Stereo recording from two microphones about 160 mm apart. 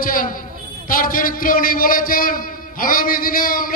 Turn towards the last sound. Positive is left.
turn(degrees=60)  # may be behind; listen again after turning